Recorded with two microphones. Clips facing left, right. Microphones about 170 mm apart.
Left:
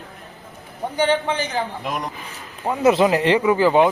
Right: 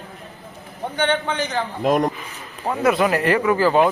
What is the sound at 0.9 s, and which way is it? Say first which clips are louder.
Speech: left 2 dB; 10° left (ahead or behind).